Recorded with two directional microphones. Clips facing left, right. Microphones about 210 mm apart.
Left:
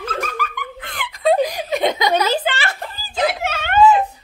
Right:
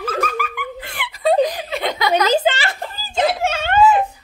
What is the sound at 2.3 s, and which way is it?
Speech, 20° right (ahead or behind).